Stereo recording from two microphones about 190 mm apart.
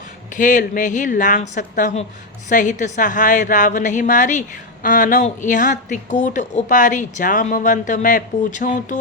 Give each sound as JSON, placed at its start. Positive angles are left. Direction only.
{"t": 0.3, "sound": "a woman's voice", "side_deg": 45}